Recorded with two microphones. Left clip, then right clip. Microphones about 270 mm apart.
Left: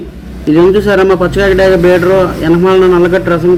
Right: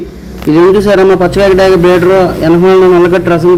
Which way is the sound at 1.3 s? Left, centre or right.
Centre.